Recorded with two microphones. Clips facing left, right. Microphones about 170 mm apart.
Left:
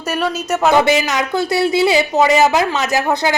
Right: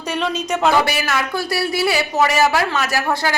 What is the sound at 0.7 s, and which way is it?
Speech, 20° left (ahead or behind).